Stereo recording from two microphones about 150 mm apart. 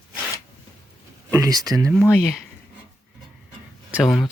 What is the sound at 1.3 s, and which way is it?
Speech, 25° right (ahead or behind).